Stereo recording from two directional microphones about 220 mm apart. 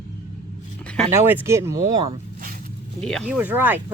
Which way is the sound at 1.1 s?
10° right (ahead or behind).